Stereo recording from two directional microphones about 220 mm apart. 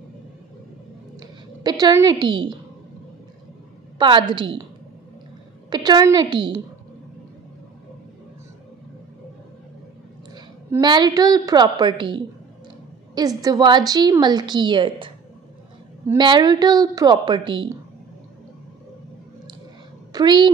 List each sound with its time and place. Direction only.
1.2 s a woman's voice: 20° right (ahead or behind)
4.0 s a woman's voice: 20° right (ahead or behind)
5.7 s a woman's voice: 20° right (ahead or behind)
10.3 s a woman's voice: 20° right (ahead or behind)
13.4 s a woman's voice: 20° right (ahead or behind)
20.1 s a woman's voice: 20° right (ahead or behind)